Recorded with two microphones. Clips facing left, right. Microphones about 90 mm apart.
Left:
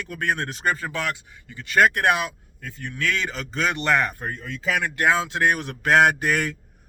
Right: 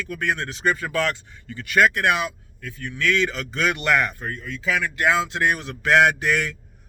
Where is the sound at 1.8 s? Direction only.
45° left (ahead or behind).